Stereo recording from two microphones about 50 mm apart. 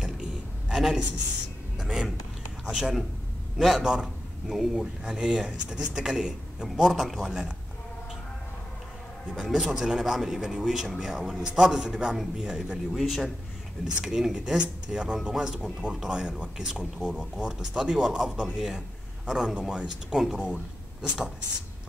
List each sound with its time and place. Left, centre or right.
0.0 s a sound: centre
3.5 s a man's voice: centre
9.4 s a man's voice: centre
12.7 s a man's voice: centre